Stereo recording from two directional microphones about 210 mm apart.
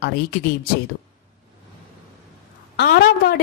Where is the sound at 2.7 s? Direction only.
55° left (ahead or behind).